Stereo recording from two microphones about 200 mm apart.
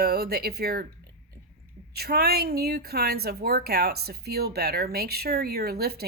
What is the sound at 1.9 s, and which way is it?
A woman's voice, 50° right (ahead or behind).